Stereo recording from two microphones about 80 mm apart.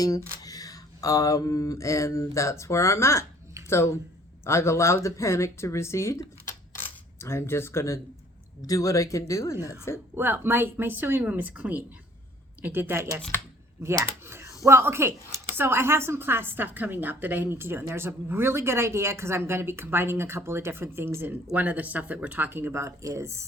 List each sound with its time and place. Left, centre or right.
0.0 s speech: left
4.4 s speech: left
10.2 s a woman's voice: right
21.5 s speech: centre; by 23.5 s right